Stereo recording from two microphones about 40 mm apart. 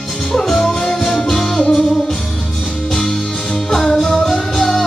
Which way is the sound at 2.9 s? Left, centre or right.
Centre.